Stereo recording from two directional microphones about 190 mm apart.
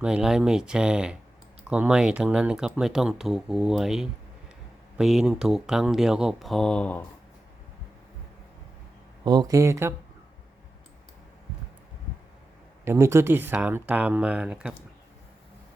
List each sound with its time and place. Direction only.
0.0 s speech: 5° right (ahead or behind)
9.2 s speech: 20° right (ahead or behind)
12.8 s speech: 15° right (ahead or behind)